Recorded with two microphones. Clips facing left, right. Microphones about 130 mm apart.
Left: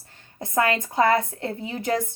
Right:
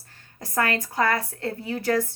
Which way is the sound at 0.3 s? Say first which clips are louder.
Left 3 dB; 20° left (ahead or behind).